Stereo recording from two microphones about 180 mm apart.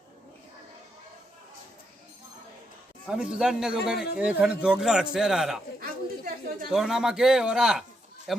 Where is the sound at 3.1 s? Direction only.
5° right (ahead or behind).